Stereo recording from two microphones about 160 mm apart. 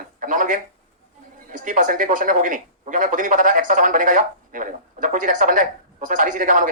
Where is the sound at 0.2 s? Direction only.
55° right (ahead or behind).